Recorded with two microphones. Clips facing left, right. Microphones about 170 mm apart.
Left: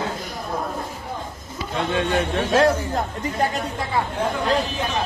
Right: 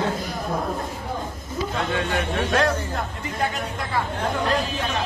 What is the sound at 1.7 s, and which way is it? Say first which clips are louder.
Speech: left 5 dB; 25° left (ahead or behind).